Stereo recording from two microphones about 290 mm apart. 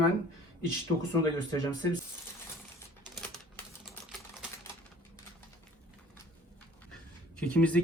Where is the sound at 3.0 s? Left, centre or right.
Centre.